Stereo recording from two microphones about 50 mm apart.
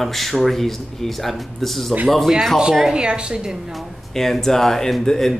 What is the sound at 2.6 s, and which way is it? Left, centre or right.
Speech, centre.